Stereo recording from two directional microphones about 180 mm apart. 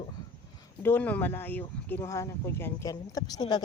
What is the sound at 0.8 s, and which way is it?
Speech, 10° left (ahead or behind).